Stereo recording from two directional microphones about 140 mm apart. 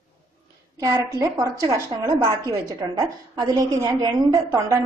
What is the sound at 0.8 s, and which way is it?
A woman's voice, 25° right (ahead or behind).